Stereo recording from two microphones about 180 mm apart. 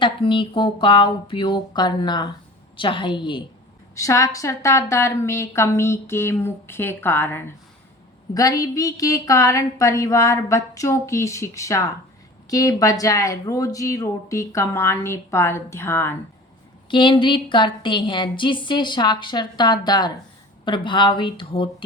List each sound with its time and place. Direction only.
0.0 s a woman's voice: 30° left (ahead or behind)
16.9 s a woman's voice: 25° left (ahead or behind)